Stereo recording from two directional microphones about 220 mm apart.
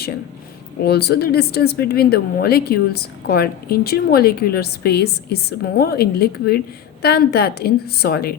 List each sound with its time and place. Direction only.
0.8 s a woman's voice: 45° left (ahead or behind)